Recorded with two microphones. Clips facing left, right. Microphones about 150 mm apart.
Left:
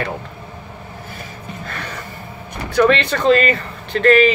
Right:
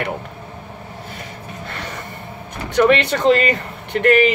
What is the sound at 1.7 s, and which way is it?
Music, 20° right (ahead or behind).